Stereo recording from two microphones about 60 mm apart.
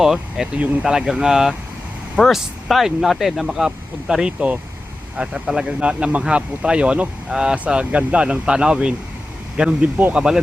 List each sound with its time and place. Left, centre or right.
0.0 s speech: centre
5.8 s speech: centre